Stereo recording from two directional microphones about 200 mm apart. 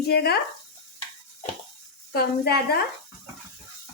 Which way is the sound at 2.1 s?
50° left (ahead or behind).